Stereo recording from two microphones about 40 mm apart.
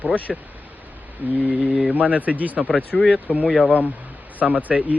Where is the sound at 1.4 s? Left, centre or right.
Right.